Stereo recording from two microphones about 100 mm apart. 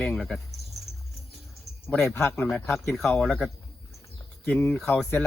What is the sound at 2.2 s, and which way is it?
Speech, 15° left (ahead or behind).